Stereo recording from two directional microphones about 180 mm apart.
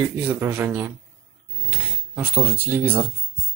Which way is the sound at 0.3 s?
10° right (ahead or behind).